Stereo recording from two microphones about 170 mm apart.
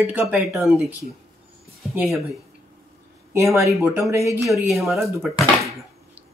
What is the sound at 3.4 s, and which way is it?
Speech, 15° right (ahead or behind).